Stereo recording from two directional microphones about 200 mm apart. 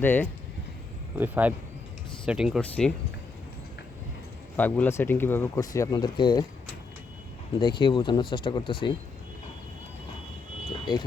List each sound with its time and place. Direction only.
0.0 s speech: 10° left (ahead or behind)
1.2 s speech: 10° right (ahead or behind)
4.5 s speech: 10° left (ahead or behind)
7.6 s speech: 25° left (ahead or behind)
10.7 s vehicle: 20° left (ahead or behind)